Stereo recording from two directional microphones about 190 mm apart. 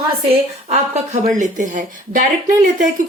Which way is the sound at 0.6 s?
35° right (ahead or behind).